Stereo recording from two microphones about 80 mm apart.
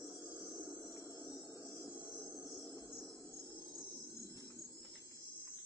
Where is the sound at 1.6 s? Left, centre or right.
Right.